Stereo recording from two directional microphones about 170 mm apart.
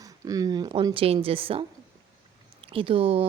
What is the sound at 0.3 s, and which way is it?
Speech, 20° right (ahead or behind).